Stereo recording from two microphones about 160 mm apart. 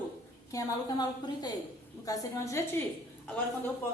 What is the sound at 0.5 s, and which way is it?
A woman's voice, 25° left (ahead or behind).